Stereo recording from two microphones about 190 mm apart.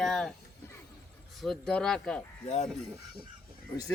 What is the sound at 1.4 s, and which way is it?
Speech, 5° left (ahead or behind).